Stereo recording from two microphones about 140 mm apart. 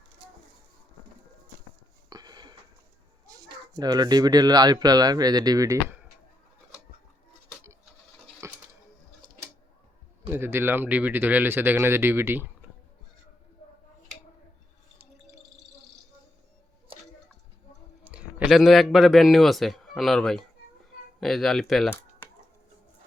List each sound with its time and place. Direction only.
2.0 s sniff: 30° right (ahead or behind)
3.2 s speech: 25° right (ahead or behind)
8.4 s a sound: 20° right (ahead or behind)
10.2 s speech: 15° right (ahead or behind)
18.0 s a man's voice: 10° right (ahead or behind)